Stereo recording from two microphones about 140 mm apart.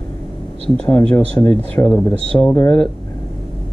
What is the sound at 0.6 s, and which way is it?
Speech, 10° left (ahead or behind).